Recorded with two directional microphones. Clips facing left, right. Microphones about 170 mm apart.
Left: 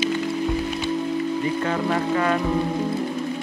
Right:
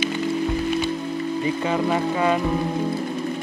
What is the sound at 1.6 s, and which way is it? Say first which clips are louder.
Speech: right 1 dB; 15° right (ahead or behind).